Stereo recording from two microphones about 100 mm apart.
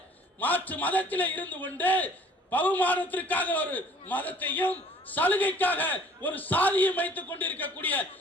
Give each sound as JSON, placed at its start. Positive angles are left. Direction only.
{"t": 0.3, "sound": "a man's voice", "side_deg": 15}